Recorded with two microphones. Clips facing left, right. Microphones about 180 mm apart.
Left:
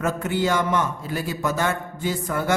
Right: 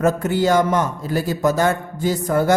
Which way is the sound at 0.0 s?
40° right (ahead or behind).